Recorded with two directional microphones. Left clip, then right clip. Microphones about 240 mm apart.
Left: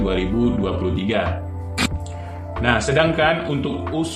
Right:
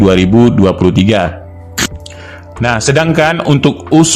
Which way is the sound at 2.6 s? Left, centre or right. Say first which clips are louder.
Right 6 dB; right.